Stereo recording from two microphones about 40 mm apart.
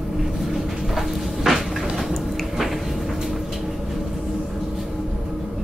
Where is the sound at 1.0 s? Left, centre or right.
Centre.